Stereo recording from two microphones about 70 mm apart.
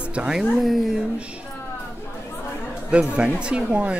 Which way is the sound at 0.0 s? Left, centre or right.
Centre.